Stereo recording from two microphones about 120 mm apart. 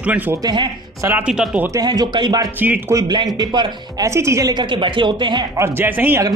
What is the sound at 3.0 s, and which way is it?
Speech, 35° right (ahead or behind).